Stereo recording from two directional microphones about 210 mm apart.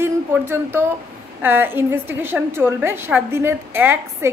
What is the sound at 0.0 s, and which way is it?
A woman's voice, 10° right (ahead or behind).